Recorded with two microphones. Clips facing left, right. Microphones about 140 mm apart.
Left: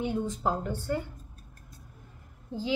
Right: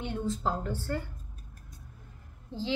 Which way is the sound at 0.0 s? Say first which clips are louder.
Left 2 dB; 15° left (ahead or behind).